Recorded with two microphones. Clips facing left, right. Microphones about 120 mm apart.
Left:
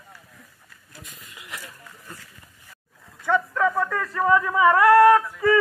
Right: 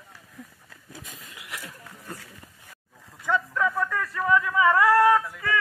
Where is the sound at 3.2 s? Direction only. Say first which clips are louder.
Left 3 dB; 15° left (ahead or behind).